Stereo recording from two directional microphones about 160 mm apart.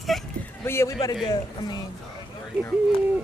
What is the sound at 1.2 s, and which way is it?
Speech, 25° left (ahead or behind).